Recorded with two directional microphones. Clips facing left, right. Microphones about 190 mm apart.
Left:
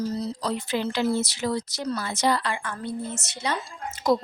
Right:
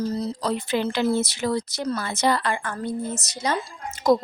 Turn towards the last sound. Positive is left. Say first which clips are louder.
# right 3 dB
turn(degrees=-45)  # may be behind; listen again after turning